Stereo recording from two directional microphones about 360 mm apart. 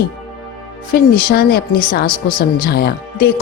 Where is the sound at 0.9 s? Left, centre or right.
Left.